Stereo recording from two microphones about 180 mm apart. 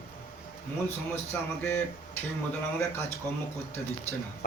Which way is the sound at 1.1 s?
10° left (ahead or behind).